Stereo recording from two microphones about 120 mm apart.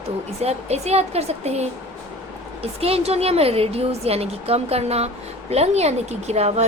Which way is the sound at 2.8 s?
60° right (ahead or behind).